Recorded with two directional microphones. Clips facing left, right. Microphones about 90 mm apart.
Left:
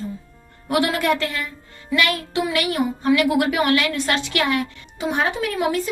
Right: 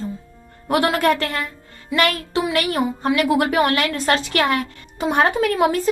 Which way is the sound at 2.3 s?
40° right (ahead or behind).